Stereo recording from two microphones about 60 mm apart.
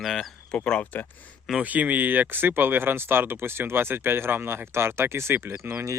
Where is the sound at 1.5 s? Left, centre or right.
Right.